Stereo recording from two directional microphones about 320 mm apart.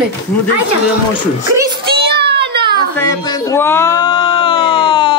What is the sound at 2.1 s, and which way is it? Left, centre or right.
Child singing, right.